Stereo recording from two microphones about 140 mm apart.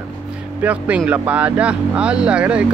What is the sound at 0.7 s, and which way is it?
Speech, 10° right (ahead or behind).